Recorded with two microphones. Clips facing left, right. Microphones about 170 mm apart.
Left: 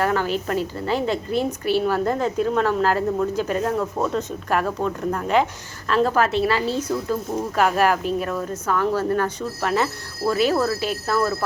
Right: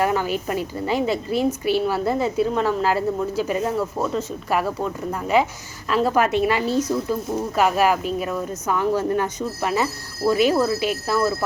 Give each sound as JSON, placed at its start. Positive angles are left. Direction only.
{"t": 0.0, "sound": "speech", "side_deg": -10}
{"t": 1.5, "sound": "a woman's voice", "side_deg": 40}
{"t": 1.8, "sound": "speech", "side_deg": -10}